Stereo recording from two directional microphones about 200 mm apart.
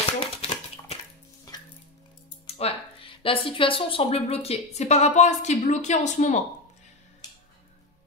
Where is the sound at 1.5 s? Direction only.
20° left (ahead or behind).